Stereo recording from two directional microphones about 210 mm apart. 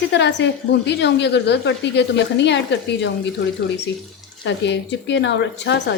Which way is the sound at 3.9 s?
55° left (ahead or behind).